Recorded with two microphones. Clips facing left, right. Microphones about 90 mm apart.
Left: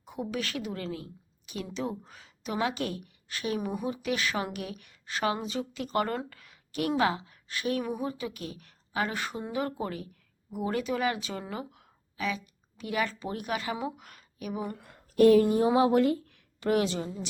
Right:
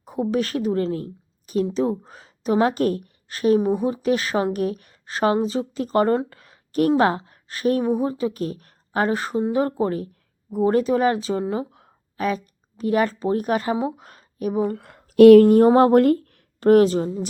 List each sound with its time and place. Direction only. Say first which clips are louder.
0.0 s a woman's voice: right 11 dB; 35° right (ahead or behind)
12.1 s speech: right 9 dB; 45° right (ahead or behind)
14.8 s speech: right 10 dB; 75° right (ahead or behind); by 17.2 s 40° right (ahead or behind)